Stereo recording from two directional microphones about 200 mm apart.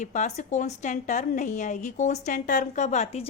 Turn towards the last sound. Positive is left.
turn(degrees=35)  # may be behind; listen again after turning